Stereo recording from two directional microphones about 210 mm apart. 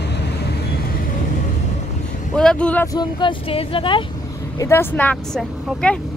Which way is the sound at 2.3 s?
5° left (ahead or behind).